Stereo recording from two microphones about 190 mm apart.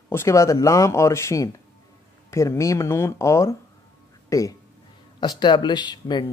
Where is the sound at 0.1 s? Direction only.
15° left (ahead or behind).